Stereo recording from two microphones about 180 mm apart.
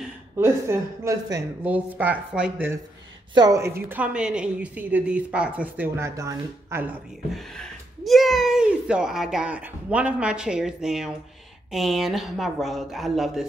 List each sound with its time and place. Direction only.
0.4 s a woman's voice: 15° right (ahead or behind)
7.3 s speech: centre (ahead or behind)